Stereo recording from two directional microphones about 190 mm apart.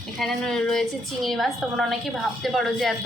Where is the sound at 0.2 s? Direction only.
Centre (ahead or behind).